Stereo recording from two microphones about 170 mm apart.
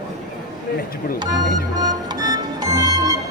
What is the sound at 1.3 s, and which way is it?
Music, 25° right (ahead or behind).